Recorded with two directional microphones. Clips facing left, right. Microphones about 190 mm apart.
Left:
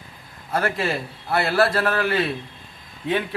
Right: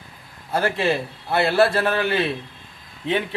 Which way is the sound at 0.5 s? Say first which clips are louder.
Right 2 dB; 25° right (ahead or behind).